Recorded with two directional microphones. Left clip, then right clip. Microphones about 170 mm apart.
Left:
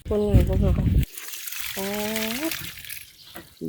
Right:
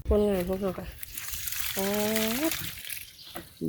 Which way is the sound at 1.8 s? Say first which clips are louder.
Even; 5° left (ahead or behind).